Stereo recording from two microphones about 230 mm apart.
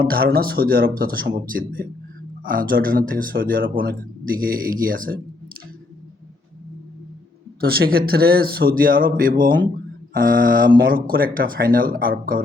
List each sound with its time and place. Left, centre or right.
0.0 s speech: right
7.6 s speech: right